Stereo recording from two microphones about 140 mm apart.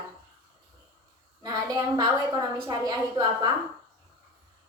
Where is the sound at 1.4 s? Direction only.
25° right (ahead or behind).